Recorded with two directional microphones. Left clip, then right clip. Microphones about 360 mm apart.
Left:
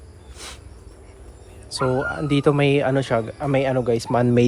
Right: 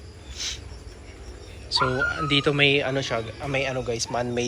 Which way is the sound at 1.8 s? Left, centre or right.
Left.